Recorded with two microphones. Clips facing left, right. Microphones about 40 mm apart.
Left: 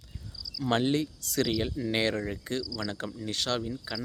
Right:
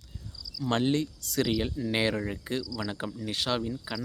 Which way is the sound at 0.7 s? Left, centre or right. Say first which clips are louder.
Even; centre.